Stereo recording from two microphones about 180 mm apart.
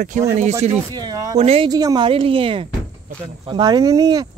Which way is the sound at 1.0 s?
20° right (ahead or behind).